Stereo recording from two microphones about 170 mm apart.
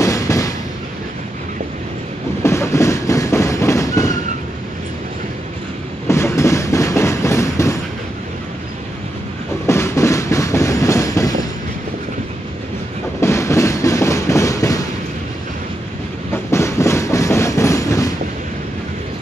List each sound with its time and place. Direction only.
0.0 s a sound: 20° left (ahead or behind)
2.4 s train: 15° left (ahead or behind)
6.0 s train: 15° left (ahead or behind)
9.7 s train: 15° left (ahead or behind)
13.2 s train: 15° left (ahead or behind)
16.4 s train: 15° left (ahead or behind)